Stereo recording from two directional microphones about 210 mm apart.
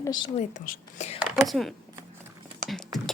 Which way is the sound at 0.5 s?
40° left (ahead or behind).